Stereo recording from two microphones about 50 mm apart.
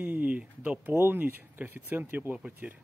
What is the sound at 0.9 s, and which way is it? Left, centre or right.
Speech, right.